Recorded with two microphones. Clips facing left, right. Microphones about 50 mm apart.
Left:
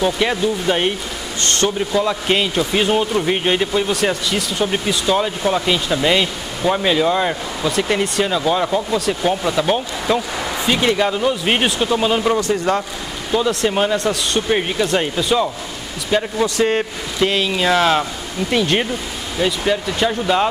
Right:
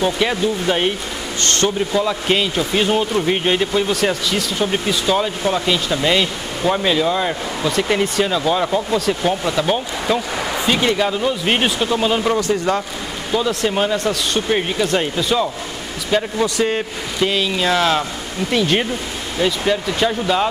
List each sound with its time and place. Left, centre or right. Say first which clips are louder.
0.0 s speech: even; centre
1.4 s a sound: even; left
1.9 s speech: even; centre
3.9 s speech: even; centre
4.6 s speech: even; centre
10.3 s a sound: right 1 dB; centre
10.8 s speech: left 1 dB; centre
16.6 s speech: left 2 dB; centre